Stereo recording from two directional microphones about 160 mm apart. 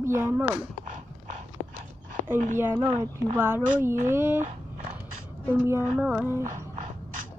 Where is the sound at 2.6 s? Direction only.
15° right (ahead or behind).